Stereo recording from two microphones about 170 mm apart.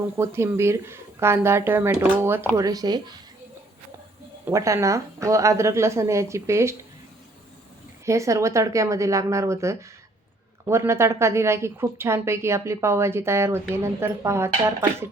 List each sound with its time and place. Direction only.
0.2 s a woman's voice: 15° right (ahead or behind)
4.4 s a woman's voice: 20° right (ahead or behind)
8.0 s a woman's voice: 20° right (ahead or behind)